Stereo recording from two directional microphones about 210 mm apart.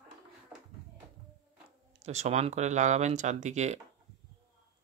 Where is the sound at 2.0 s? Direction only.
30° right (ahead or behind).